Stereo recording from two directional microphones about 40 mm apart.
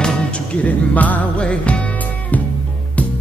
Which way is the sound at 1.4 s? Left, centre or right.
Left.